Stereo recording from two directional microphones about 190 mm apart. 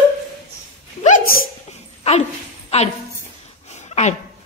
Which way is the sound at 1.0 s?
40° left (ahead or behind).